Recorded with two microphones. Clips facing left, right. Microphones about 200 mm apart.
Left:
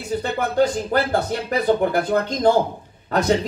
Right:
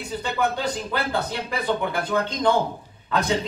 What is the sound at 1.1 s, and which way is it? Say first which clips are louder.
Speech: left 5 dB; 45° left (ahead or behind).